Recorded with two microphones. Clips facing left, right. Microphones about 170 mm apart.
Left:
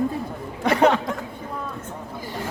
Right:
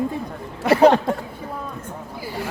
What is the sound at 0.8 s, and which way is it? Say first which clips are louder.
Speech: right 5 dB; 35° right (ahead or behind).